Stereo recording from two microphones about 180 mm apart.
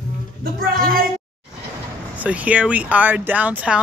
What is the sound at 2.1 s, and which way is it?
Speech, 10° right (ahead or behind).